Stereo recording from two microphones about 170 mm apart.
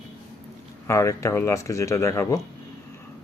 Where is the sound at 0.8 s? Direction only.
20° left (ahead or behind).